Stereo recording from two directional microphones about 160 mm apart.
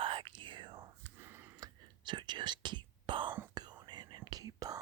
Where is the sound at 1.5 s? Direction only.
25° right (ahead or behind).